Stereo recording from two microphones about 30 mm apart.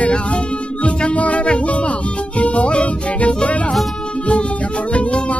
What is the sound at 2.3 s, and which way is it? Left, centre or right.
Music, left.